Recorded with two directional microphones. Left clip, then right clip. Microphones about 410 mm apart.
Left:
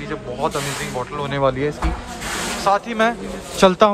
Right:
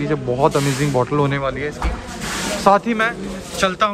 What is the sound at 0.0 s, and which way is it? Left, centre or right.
Speech, centre.